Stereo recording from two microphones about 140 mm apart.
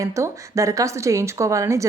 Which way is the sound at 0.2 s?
20° right (ahead or behind).